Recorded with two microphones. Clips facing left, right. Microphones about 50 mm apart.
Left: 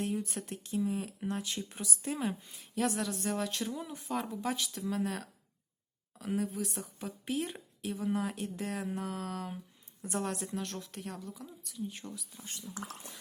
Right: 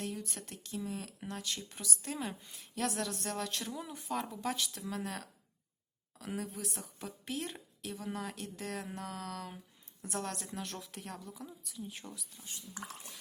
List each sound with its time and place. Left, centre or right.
0.0 s a woman's voice: centre